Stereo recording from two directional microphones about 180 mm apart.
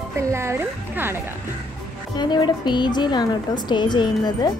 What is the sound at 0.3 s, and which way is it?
Speech, 15° right (ahead or behind).